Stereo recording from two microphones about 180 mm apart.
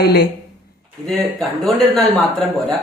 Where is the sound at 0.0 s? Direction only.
60° left (ahead or behind).